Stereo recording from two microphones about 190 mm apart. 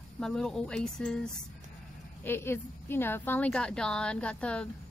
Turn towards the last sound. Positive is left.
turn(degrees=5)  # may be behind; listen again after turning